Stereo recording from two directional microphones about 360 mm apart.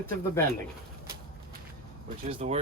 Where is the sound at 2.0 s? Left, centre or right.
Centre.